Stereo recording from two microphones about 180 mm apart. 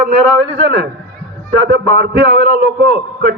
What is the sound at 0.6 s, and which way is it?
Speech, 75° right (ahead or behind).